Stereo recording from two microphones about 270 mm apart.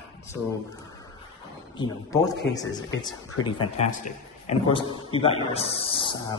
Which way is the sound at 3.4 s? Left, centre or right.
Centre.